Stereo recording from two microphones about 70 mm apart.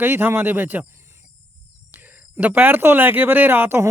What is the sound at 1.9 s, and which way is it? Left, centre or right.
Speech, right.